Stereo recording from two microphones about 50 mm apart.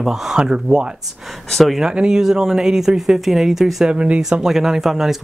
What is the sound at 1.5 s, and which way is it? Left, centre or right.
Speech, centre.